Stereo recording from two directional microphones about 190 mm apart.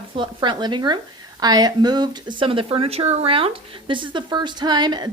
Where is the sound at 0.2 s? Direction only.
25° right (ahead or behind).